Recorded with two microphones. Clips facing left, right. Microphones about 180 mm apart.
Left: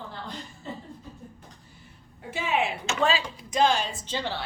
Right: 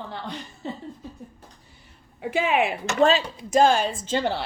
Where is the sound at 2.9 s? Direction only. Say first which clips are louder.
Right 7 dB; 40° right (ahead or behind).